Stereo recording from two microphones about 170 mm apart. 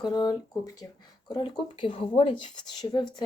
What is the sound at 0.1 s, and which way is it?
A woman's voice, 20° left (ahead or behind).